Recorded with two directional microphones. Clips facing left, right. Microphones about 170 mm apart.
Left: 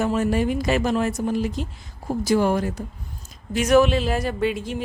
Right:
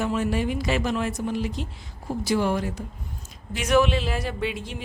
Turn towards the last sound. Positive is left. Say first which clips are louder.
# left 6 dB
turn(degrees=45)  # may be behind; listen again after turning